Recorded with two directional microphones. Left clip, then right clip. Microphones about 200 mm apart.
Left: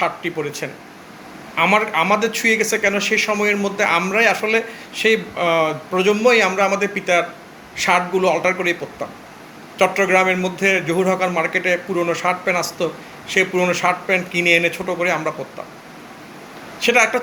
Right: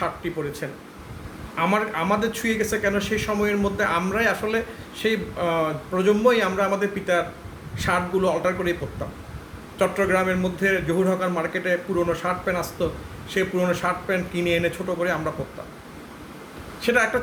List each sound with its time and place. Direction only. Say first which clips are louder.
0.0 s a man's voice: left 6 dB; 10° right (ahead or behind)
9.7 s a man's voice: left 6 dB; 15° right (ahead or behind)
16.8 s a man's voice: left 6 dB; 10° right (ahead or behind)